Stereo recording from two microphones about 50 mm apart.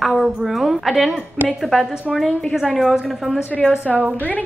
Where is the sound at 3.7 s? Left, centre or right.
Right.